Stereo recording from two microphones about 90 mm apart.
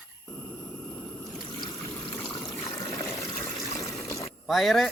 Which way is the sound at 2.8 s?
50° left (ahead or behind).